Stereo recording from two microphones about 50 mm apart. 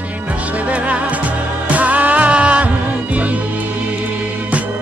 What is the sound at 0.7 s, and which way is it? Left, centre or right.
Music, right.